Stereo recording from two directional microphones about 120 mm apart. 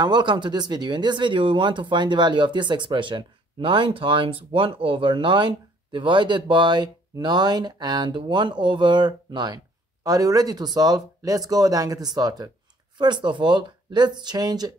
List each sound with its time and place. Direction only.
0.0 s speech: 40° right (ahead or behind)